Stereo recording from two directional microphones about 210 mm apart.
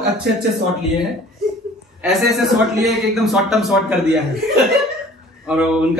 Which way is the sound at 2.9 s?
Centre (ahead or behind).